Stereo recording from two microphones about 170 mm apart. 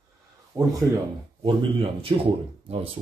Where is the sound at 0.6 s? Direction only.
20° right (ahead or behind).